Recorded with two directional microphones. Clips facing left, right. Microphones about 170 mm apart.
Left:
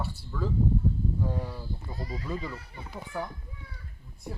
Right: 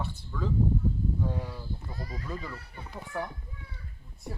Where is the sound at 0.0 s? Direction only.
10° left (ahead or behind).